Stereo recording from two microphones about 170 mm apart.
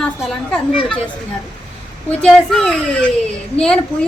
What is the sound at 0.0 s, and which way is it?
Speech, 5° left (ahead or behind).